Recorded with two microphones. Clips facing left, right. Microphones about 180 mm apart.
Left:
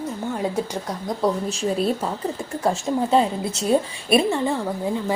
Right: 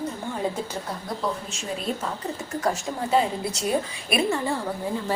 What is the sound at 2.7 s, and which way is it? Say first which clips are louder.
A woman's voice: left 6 dB; 25° left (ahead or behind).